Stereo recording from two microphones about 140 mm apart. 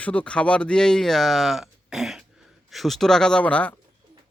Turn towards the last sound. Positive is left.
turn(degrees=10)  # may be behind; listen again after turning